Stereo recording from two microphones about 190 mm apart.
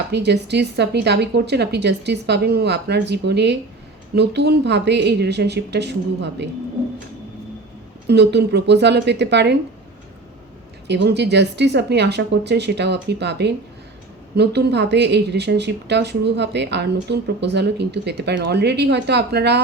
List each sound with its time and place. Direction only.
0.1 s speech: 60° right (ahead or behind)
8.0 s speech: 60° right (ahead or behind)
10.8 s speech: 65° right (ahead or behind)